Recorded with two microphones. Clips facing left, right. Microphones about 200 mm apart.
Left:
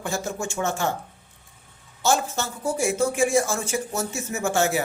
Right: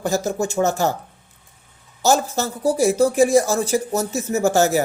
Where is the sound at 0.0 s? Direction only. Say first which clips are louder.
Right 7 dB; 40° right (ahead or behind).